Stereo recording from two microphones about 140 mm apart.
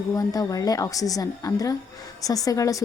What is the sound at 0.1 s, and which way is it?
Speech, 25° left (ahead or behind).